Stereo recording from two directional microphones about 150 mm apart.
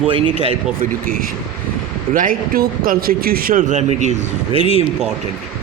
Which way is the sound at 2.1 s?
70° right (ahead or behind).